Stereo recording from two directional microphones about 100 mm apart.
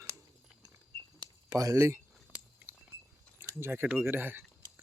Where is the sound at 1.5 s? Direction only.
35° right (ahead or behind).